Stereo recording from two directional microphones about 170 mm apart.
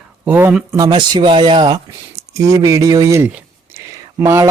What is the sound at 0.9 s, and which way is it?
Speech, 25° right (ahead or behind).